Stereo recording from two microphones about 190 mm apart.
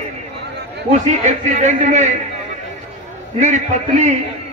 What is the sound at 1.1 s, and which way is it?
A man's voice, 40° right (ahead or behind).